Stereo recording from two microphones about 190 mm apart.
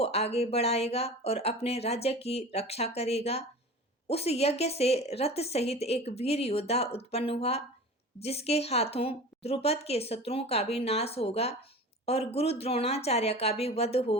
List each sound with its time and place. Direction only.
0.0 s a woman's voice: 35° left (ahead or behind)